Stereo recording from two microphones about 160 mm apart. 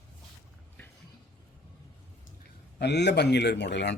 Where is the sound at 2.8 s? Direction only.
90° left.